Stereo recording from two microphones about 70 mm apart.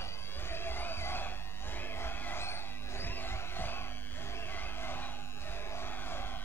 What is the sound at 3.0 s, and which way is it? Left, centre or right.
Music, left.